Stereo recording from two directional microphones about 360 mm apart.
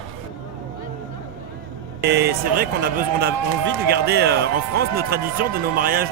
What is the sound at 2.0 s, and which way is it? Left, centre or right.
Speech, right.